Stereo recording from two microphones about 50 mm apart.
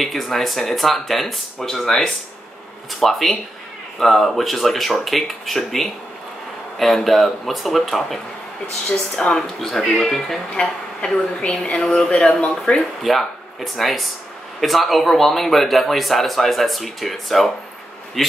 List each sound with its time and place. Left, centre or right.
0.0 s a man's voice: centre
9.2 s a woman's voice: centre
10.6 s a woman's voice: centre
13.0 s a man's voice: centre